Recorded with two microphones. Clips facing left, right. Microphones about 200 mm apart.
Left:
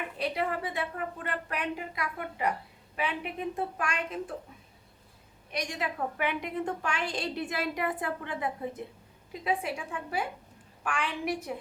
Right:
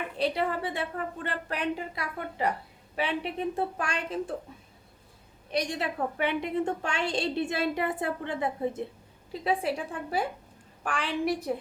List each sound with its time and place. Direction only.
0.2 s a woman's voice: 30° right (ahead or behind)
5.5 s a woman's voice: 30° right (ahead or behind)